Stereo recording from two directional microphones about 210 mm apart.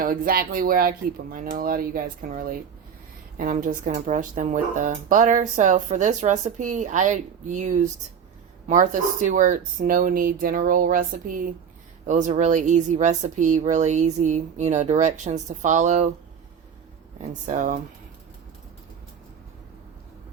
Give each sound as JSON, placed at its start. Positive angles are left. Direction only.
{"t": 0.0, "sound": "speech", "side_deg": -45}
{"t": 17.2, "sound": "speech", "side_deg": -35}